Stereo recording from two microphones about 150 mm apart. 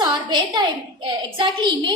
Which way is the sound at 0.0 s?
30° right (ahead or behind).